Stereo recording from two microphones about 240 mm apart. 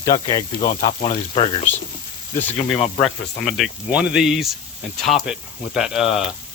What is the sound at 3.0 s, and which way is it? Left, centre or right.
Speech, centre.